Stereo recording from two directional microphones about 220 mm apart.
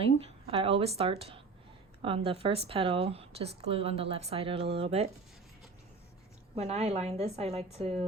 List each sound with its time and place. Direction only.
0.5 s speech: 25° right (ahead or behind)
6.6 s speech: 30° right (ahead or behind)